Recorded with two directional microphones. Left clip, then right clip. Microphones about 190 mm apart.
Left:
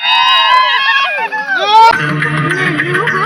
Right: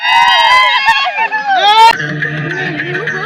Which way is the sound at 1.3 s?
Centre (ahead or behind).